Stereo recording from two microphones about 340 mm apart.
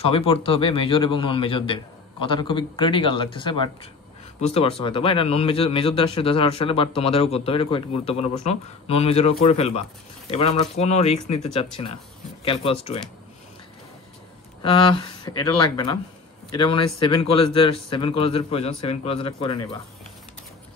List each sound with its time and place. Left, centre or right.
0.0 s a man's voice: centre
14.6 s a man's voice: centre